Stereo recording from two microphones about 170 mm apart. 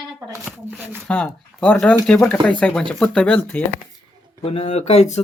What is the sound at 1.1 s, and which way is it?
Speech, 5° left (ahead or behind).